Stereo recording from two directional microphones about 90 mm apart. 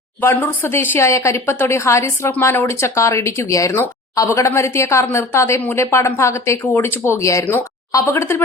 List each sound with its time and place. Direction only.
0.3 s a woman's voice: 25° left (ahead or behind)